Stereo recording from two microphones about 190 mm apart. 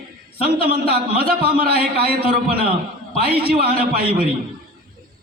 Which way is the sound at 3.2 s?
55° right (ahead or behind).